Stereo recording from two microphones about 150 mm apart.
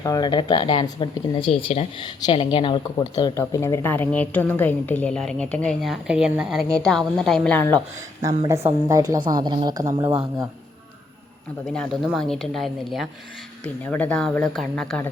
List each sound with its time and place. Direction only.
0.0 s a woman's voice: 25° left (ahead or behind); by 7.6 s 5° left (ahead or behind)
8.9 s speech: 20° right (ahead or behind)
11.6 s speech: 5° left (ahead or behind)
13.8 s speech: 10° left (ahead or behind)